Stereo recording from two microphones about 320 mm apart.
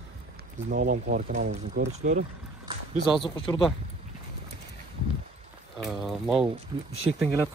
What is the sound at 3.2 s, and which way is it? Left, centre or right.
Speech, centre.